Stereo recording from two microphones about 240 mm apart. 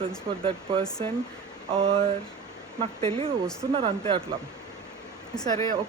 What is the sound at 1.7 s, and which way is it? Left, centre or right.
Speech, right.